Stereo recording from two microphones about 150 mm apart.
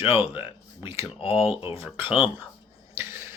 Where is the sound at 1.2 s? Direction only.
35° left (ahead or behind).